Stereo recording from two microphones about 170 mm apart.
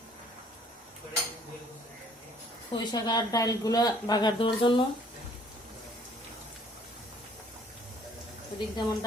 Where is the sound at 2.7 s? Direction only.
25° left (ahead or behind).